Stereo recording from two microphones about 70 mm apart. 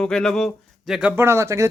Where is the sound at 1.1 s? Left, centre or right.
Right.